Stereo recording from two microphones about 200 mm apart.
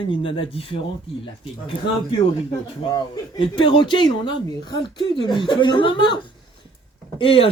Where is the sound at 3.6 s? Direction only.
25° left (ahead or behind).